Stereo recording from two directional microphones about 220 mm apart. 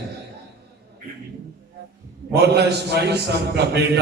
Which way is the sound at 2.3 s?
50° right (ahead or behind).